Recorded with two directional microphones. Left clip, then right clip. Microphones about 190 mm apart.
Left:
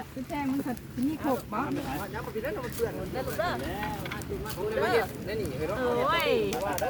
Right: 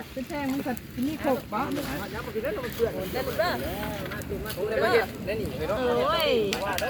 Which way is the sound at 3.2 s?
40° right (ahead or behind).